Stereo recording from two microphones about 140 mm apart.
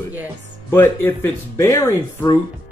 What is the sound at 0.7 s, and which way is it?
Speech, 15° left (ahead or behind).